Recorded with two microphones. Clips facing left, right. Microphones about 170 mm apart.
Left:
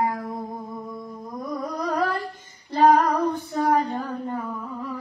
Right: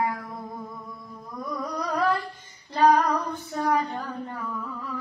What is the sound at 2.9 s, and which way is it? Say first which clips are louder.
Humming: left 3 dB; 50° left (ahead or behind).